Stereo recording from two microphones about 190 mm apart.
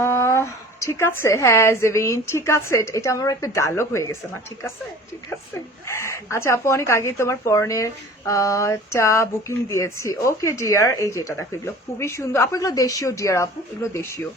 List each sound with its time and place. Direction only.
0.0 s speech: 15° left (ahead or behind)
5.9 s speech: 15° left (ahead or behind)